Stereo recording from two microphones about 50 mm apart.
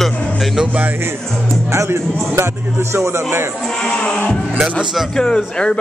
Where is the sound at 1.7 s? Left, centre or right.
Right.